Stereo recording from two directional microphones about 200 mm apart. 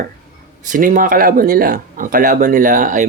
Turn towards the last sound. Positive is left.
turn(degrees=-40)  # may be behind; listen again after turning